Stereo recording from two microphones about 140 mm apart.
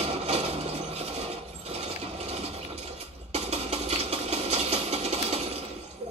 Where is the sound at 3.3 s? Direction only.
50° right (ahead or behind).